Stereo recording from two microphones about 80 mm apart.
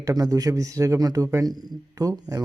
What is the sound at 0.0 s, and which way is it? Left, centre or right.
Speech, right.